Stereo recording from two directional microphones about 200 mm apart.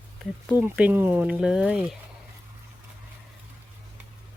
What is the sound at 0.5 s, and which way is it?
Speech, 10° right (ahead or behind).